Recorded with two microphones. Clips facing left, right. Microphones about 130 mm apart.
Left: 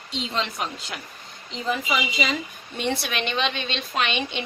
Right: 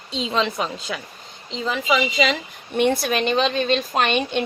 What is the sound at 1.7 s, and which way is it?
Speech, 90° right.